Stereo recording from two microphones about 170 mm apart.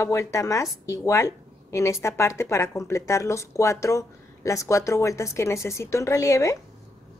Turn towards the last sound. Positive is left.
turn(degrees=20)  # may be behind; listen again after turning